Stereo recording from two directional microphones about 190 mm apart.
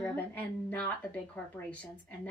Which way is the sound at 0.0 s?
10° left (ahead or behind).